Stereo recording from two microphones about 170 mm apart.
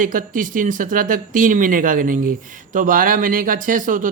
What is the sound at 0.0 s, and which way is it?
Speech, 55° right (ahead or behind).